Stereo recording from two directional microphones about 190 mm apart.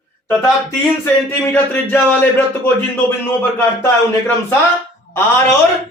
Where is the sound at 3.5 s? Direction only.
10° left (ahead or behind).